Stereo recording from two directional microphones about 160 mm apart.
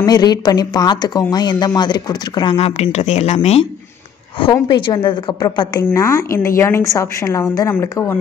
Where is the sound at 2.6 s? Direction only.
40° left (ahead or behind).